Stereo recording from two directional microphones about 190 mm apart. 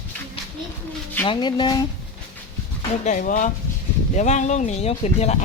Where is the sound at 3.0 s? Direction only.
40° left (ahead or behind).